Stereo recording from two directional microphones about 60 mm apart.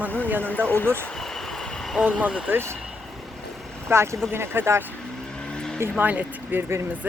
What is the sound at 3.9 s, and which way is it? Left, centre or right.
Speech, right.